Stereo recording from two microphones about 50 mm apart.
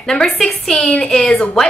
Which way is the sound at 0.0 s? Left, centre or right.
Centre.